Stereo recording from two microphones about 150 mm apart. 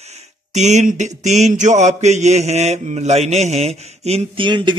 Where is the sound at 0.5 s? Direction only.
50° right (ahead or behind).